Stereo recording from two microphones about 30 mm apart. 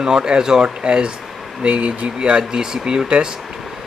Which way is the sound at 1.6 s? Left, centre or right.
Right.